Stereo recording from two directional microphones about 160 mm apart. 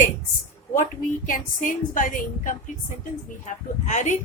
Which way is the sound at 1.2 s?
55° left (ahead or behind).